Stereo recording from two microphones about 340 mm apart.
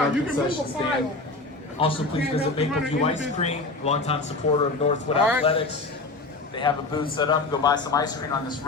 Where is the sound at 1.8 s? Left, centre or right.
Centre.